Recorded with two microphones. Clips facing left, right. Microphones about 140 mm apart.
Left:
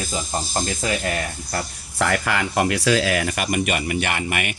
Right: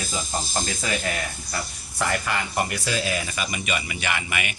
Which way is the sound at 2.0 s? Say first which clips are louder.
Left 4 dB; 80° left.